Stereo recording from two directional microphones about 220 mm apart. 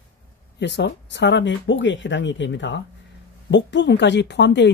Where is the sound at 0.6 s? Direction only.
50° left (ahead or behind).